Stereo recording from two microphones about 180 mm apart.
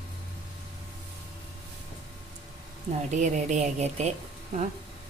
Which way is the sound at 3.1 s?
40° right (ahead or behind).